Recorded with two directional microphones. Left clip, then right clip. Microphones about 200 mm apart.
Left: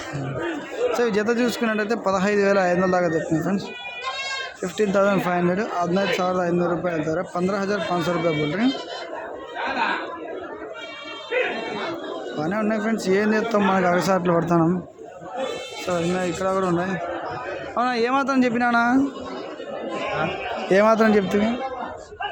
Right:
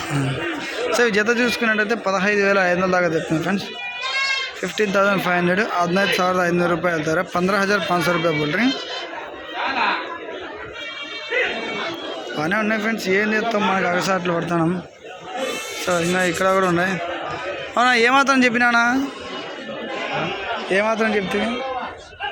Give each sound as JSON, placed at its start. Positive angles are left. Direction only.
{"t": 0.9, "sound": "a man's voice", "side_deg": 5}
{"t": 4.6, "sound": "a man's voice", "side_deg": 10}
{"t": 12.4, "sound": "a man's voice", "side_deg": 5}
{"t": 15.9, "sound": "a man's voice", "side_deg": 0}
{"t": 20.7, "sound": "a man's voice", "side_deg": 20}